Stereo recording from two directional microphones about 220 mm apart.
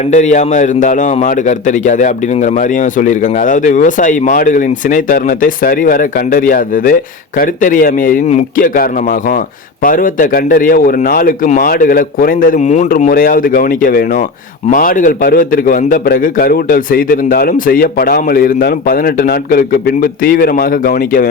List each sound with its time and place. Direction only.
0.1 s a man's voice: 35° left (ahead or behind)